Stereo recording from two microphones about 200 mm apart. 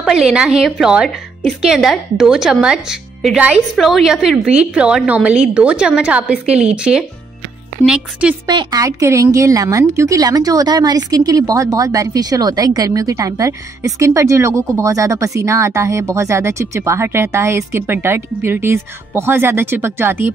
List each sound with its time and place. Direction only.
0.0 s speech: 5° right (ahead or behind)
8.5 s a woman's voice: 20° right (ahead or behind)